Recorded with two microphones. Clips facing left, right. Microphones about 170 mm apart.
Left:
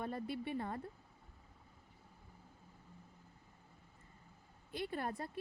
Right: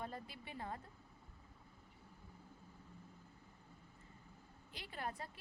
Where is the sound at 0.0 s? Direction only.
60° left (ahead or behind).